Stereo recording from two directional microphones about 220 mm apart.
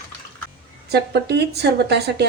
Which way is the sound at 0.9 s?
50° right (ahead or behind).